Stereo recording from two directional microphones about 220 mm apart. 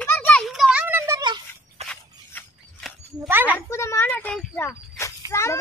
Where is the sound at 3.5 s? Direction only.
10° left (ahead or behind).